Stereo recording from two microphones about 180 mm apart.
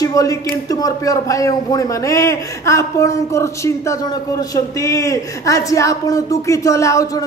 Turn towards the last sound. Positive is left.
turn(degrees=15)  # may be behind; listen again after turning